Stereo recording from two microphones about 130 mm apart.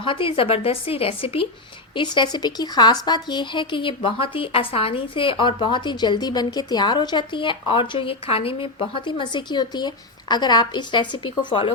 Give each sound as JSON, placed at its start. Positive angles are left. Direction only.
{"t": 0.0, "sound": "speech", "side_deg": 40}
{"t": 2.0, "sound": "a woman's voice", "side_deg": 35}